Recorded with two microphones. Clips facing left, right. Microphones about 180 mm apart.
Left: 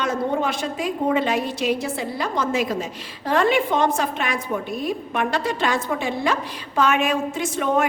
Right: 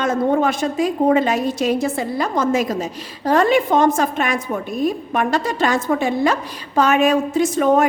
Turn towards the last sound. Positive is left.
turn(degrees=-40)  # may be behind; listen again after turning